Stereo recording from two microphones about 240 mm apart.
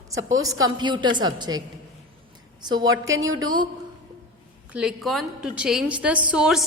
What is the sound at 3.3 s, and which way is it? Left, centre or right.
Speech, right.